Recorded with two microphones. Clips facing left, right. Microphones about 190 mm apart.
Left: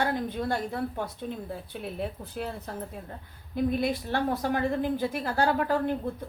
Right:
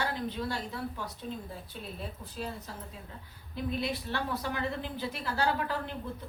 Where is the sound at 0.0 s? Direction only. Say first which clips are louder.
Left 5 dB; 50° left (ahead or behind).